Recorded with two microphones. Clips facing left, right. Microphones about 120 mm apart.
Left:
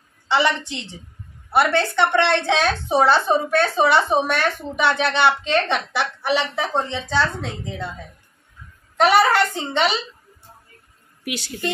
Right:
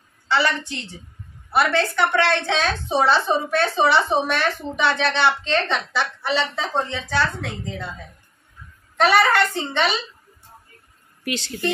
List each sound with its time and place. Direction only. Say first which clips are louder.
0.3 s a woman's voice: left 2 dB; 20° left (ahead or behind)
3.0 s a woman's voice: left 2 dB; centre (ahead or behind); by 7.8 s 15° left (ahead or behind)
8.9 s a woman's voice: left 1 dB; 15° left (ahead or behind)
11.2 s a woman's voice: right 2 dB; 10° left (ahead or behind)